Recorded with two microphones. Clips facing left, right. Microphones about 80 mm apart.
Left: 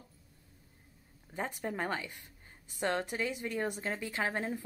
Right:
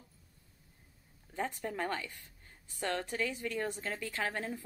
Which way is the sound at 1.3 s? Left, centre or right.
Centre.